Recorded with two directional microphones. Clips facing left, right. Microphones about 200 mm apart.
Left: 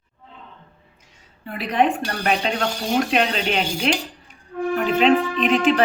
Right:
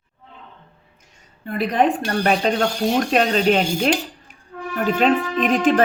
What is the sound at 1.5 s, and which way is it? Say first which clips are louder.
A woman's voice: right 2 dB; 45° right (ahead or behind).